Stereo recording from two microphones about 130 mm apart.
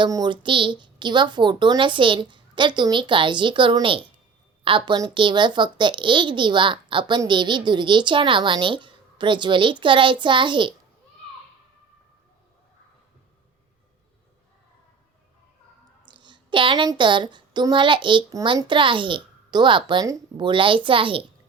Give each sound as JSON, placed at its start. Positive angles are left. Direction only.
{"t": 0.0, "sound": "speech", "side_deg": -35}
{"t": 16.0, "sound": "speech", "side_deg": -35}